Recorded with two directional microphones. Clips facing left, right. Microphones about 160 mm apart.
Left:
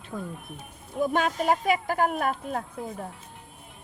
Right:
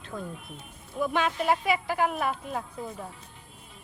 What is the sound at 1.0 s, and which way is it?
Speech, 45° left (ahead or behind).